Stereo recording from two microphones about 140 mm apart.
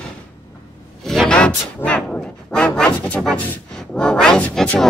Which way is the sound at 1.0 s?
Centre (ahead or behind).